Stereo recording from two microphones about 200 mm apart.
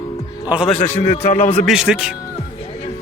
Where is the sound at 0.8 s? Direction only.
35° left (ahead or behind).